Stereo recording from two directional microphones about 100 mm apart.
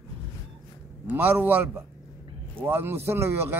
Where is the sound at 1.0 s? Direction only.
15° right (ahead or behind).